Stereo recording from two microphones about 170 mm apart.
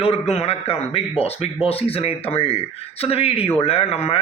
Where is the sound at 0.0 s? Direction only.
35° left (ahead or behind).